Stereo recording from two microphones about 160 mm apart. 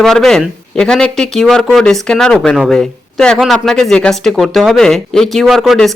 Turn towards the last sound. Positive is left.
turn(degrees=0)  # may be behind; listen again after turning